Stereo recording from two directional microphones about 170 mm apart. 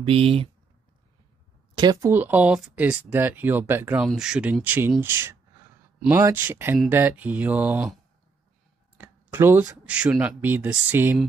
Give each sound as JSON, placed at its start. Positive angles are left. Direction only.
{"t": 0.0, "sound": "speech", "side_deg": -35}
{"t": 1.8, "sound": "speech", "side_deg": -25}
{"t": 2.1, "sound": "speech", "side_deg": -10}
{"t": 8.9, "sound": "speech", "side_deg": -10}